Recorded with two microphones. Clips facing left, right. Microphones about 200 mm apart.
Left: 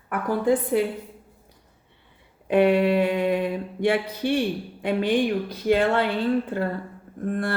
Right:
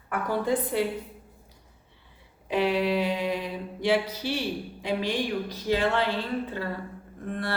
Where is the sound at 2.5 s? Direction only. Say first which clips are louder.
Left 6 dB; 55° left (ahead or behind).